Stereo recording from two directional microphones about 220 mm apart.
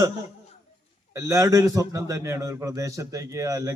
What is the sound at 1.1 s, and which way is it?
Speech, 15° right (ahead or behind).